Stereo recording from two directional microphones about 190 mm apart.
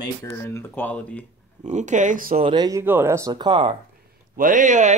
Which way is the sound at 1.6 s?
40° right (ahead or behind).